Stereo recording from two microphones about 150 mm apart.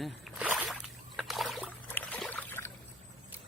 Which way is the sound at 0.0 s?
5° right (ahead or behind).